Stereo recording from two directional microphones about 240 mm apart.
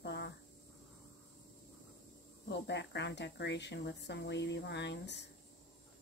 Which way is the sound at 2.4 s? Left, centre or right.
Left.